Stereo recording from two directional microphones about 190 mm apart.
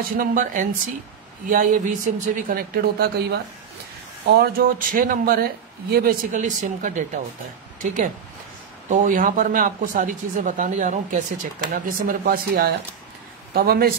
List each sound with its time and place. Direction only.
0.2 s speech: 45° right (ahead or behind)